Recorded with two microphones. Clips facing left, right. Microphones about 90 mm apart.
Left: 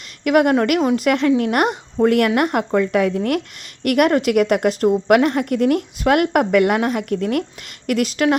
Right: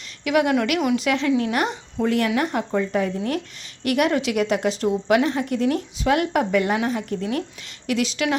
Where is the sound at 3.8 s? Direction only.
55° left (ahead or behind).